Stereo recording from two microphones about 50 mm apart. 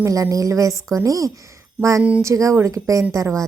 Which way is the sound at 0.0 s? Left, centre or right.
Right.